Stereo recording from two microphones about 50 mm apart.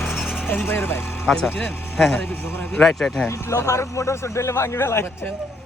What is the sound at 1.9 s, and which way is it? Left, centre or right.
Speech, centre.